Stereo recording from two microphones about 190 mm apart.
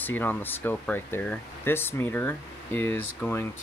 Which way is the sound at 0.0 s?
10° left (ahead or behind).